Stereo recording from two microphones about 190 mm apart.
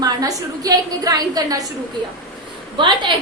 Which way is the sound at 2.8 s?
25° right (ahead or behind).